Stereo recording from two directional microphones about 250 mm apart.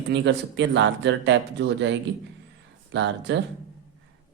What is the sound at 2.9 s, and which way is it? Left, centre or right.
Speech, right.